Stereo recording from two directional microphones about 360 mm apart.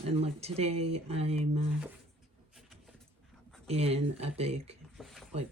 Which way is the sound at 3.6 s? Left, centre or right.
Centre.